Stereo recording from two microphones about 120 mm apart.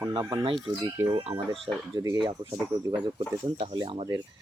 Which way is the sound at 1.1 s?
55° right (ahead or behind).